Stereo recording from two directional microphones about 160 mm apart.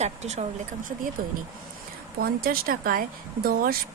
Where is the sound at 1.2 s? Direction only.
65° right (ahead or behind).